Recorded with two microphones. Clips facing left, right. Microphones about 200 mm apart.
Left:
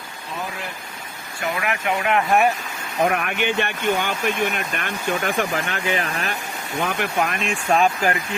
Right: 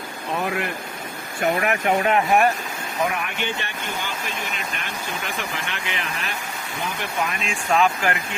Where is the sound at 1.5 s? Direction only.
40° right (ahead or behind).